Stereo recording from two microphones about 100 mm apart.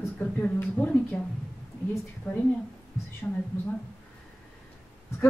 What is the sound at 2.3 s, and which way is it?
Speech, 20° left (ahead or behind).